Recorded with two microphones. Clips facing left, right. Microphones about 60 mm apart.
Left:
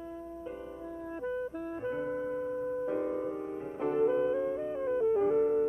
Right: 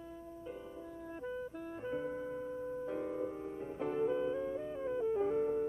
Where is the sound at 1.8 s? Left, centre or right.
Left.